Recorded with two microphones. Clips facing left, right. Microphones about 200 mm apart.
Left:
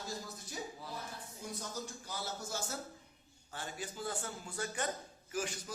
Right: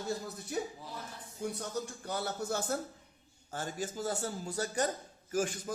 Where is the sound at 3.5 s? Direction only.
45° right (ahead or behind).